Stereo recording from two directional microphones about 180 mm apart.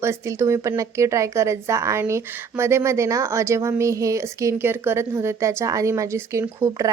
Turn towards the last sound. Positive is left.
turn(degrees=-20)  # may be behind; listen again after turning